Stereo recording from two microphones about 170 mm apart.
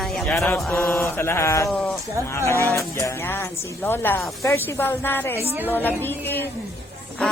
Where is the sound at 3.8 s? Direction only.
15° left (ahead or behind).